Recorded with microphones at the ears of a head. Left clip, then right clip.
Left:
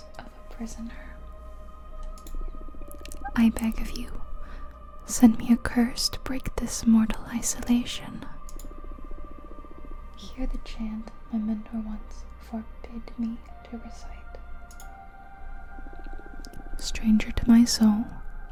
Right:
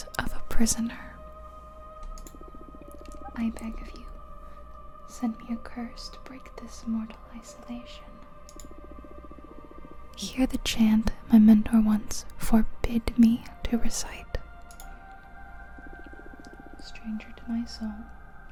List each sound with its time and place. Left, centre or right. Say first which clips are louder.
0.2 s whispering: right 12 dB; right
3.2 s speech: left 9 dB; left
5.0 s speech: left 13 dB; left
10.2 s speech: right 10 dB; right
16.8 s speech: left 14 dB; left